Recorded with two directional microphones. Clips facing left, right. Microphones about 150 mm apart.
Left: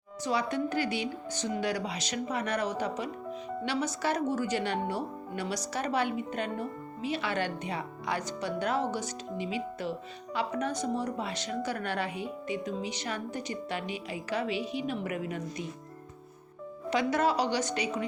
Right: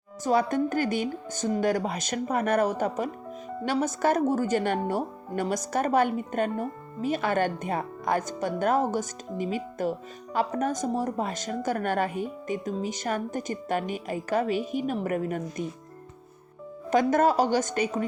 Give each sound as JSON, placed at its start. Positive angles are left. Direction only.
{"t": 0.3, "sound": "speech", "side_deg": -45}
{"t": 16.9, "sound": "speech", "side_deg": -50}